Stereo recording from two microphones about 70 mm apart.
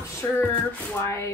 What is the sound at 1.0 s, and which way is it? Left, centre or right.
Speech, left.